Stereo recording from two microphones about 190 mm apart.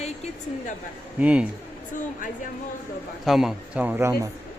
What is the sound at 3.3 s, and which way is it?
A man's voice, centre (ahead or behind).